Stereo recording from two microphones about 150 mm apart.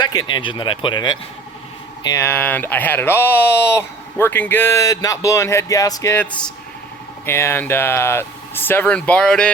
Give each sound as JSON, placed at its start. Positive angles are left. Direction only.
{"t": 0.0, "sound": "speech", "side_deg": 30}
{"t": 2.0, "sound": "speech", "side_deg": 15}
{"t": 7.3, "sound": "speech", "side_deg": 15}